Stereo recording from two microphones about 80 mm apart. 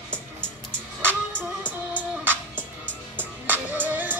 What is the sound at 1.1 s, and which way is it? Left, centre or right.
Music, centre.